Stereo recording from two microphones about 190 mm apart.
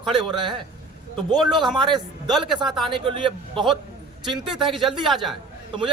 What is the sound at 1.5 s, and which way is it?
Speech, centre (ahead or behind).